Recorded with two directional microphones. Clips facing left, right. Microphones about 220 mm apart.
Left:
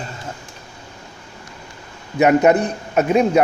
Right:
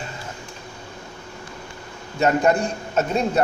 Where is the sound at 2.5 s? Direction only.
15° left (ahead or behind).